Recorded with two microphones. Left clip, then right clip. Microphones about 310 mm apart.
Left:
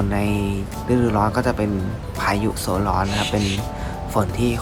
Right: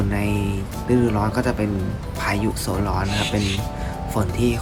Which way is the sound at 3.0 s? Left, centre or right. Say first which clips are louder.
Left 1 dB; centre.